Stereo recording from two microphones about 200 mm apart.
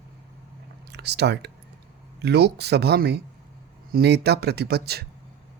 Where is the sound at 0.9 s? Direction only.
55° right (ahead or behind).